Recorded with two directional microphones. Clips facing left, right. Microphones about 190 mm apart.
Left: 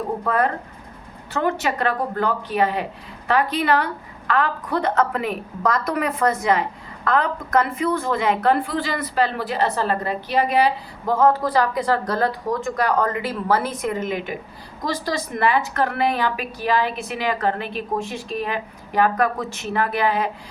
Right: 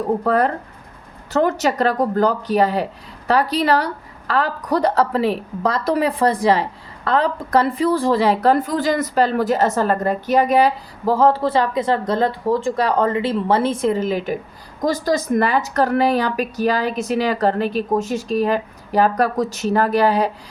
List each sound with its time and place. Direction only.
0.3 s a woman's voice: 40° right (ahead or behind)